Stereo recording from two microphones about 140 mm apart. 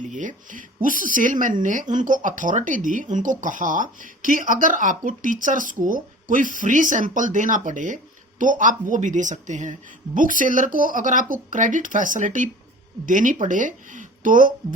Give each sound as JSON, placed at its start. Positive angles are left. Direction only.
{"t": 0.0, "sound": "a woman's voice", "side_deg": -65}
{"t": 10.2, "sound": "speech", "side_deg": -70}